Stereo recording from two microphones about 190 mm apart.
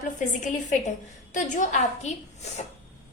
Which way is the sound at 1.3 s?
40° left (ahead or behind).